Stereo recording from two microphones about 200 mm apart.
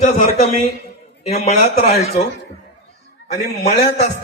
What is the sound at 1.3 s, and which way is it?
Speech, 30° left (ahead or behind).